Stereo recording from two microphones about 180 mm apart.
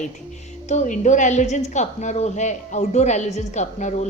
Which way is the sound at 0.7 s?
40° left (ahead or behind).